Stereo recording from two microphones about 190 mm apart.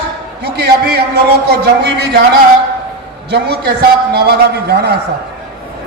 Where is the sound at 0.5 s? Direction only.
60° right (ahead or behind).